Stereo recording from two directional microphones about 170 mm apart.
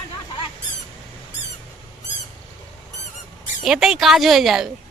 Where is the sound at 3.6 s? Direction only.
5° right (ahead or behind).